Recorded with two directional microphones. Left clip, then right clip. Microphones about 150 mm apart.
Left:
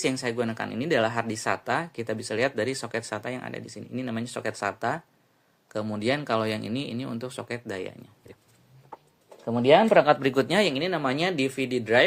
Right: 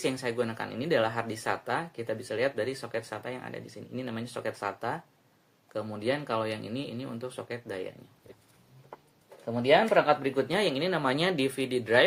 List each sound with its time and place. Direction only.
0.0 s speech: 40° left (ahead or behind)
9.5 s speech: 60° left (ahead or behind); by 10.4 s 90° left
10.5 s speech: 40° left (ahead or behind)
10.8 s speech: 25° left (ahead or behind)